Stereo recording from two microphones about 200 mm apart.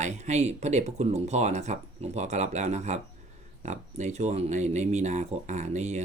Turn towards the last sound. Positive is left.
turn(degrees=-35)  # may be behind; listen again after turning